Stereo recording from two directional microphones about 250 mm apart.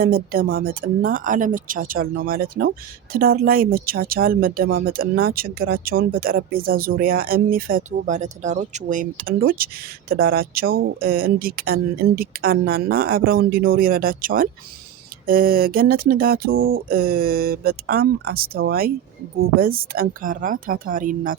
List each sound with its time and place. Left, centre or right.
0.0 s speech: right